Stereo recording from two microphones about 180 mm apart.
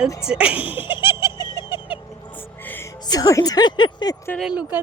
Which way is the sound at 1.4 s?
25° left (ahead or behind).